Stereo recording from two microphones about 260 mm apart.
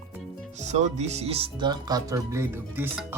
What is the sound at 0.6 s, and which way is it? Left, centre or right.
Speech, right.